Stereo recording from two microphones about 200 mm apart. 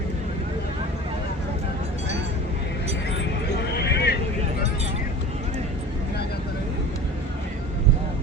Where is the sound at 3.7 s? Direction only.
55° left (ahead or behind).